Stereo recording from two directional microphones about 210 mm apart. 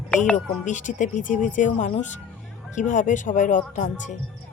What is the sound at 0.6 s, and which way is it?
Speech, 35° left (ahead or behind).